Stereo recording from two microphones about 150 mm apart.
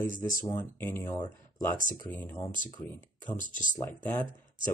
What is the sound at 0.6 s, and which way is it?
Speech, 15° left (ahead or behind).